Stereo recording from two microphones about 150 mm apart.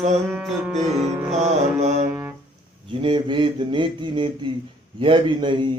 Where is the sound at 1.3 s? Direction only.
45° right (ahead or behind).